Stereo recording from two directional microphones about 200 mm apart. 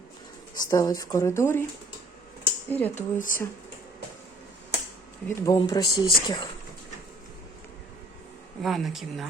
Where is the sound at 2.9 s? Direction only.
40° left (ahead or behind).